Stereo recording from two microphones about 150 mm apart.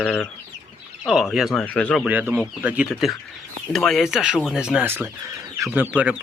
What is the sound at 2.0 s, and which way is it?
Speech, 10° right (ahead or behind).